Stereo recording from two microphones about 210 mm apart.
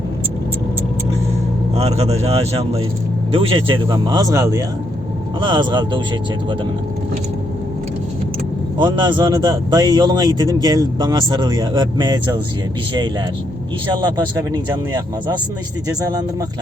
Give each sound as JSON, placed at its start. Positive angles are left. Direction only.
{"t": 1.7, "sound": "a man's voice", "side_deg": -30}
{"t": 8.8, "sound": "a man's voice", "side_deg": -20}
{"t": 14.5, "sound": "a man's voice", "side_deg": -20}